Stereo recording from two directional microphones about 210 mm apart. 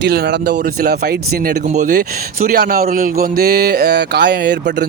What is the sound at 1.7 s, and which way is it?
A man's voice, 40° right (ahead or behind).